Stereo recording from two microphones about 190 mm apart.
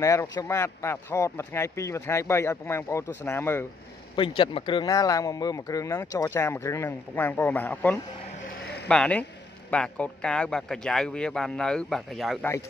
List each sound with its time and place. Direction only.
0.0 s speech: 15° left (ahead or behind)
4.1 s a man's voice: 25° left (ahead or behind); by 12.4 s centre (ahead or behind)